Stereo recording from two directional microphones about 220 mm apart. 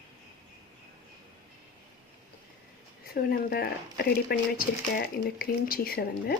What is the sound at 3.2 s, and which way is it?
Speech, 45° left (ahead or behind).